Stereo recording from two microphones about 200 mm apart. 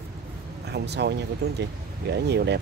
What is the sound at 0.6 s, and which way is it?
Speech, 55° right (ahead or behind).